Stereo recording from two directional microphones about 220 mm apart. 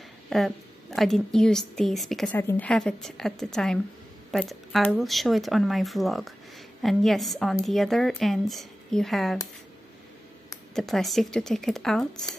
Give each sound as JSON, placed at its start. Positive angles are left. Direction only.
{"t": 0.3, "sound": "a woman's voice", "side_deg": 0}
{"t": 10.7, "sound": "a woman's voice", "side_deg": 0}